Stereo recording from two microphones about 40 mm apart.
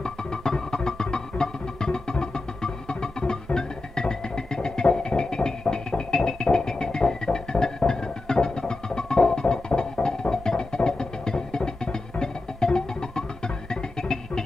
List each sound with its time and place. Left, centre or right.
0.0 s music: centre